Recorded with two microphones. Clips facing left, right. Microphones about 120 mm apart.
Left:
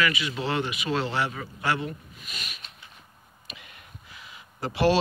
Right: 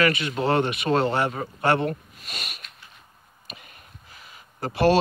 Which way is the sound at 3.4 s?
40° right (ahead or behind).